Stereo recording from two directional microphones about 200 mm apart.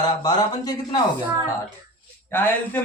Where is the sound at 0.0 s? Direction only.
20° left (ahead or behind).